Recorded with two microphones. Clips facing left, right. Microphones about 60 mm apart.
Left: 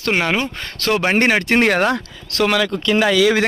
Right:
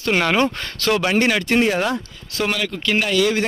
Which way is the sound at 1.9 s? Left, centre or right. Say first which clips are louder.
Left 4 dB; left.